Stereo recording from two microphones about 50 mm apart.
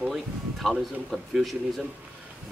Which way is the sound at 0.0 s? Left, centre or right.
Centre.